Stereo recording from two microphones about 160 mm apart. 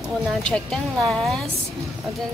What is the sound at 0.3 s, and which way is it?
A woman's voice, 5° left (ahead or behind).